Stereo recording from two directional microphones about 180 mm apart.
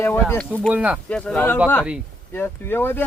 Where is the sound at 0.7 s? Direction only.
5° right (ahead or behind).